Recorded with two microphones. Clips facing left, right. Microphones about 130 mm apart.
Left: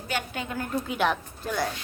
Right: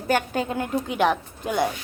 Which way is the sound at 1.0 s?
15° right (ahead or behind).